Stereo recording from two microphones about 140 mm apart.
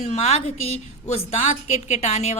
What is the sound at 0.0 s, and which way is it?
A woman's voice, 50° left (ahead or behind).